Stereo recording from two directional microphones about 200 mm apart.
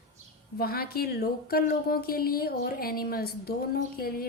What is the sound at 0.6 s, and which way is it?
A woman's voice, 50° left (ahead or behind).